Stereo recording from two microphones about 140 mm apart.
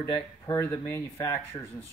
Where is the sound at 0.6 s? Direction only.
10° left (ahead or behind).